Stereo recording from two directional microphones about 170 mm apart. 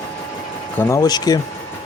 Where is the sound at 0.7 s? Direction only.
15° left (ahead or behind).